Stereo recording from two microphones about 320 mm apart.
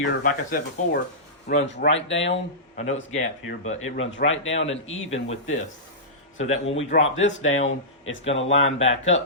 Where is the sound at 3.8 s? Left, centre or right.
Left.